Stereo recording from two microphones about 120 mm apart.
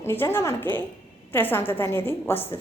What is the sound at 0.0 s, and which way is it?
A woman's voice, 20° left (ahead or behind).